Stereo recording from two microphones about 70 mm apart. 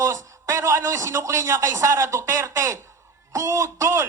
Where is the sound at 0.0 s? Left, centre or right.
Right.